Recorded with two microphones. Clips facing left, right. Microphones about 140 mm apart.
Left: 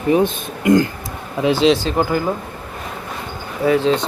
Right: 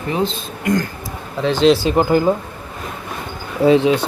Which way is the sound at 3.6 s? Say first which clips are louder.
Right 4 dB; 25° right (ahead or behind).